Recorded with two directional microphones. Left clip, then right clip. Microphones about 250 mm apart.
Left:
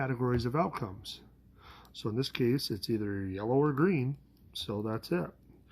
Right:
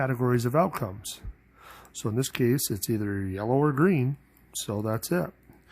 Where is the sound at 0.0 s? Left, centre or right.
Right.